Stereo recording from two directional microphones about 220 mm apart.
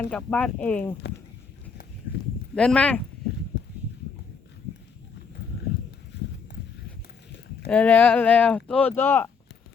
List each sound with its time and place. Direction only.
0.1 s speech: 5° left (ahead or behind)
2.6 s speech: 5° left (ahead or behind)
6.1 s horse: 50° left (ahead or behind)
7.7 s speech: 5° left (ahead or behind)